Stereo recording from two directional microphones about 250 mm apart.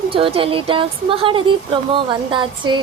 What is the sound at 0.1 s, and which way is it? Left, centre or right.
A woman's voice, right.